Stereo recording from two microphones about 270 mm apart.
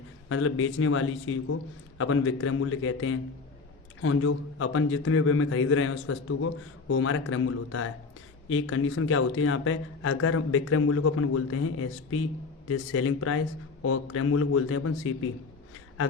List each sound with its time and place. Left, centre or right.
0.3 s a man's voice: left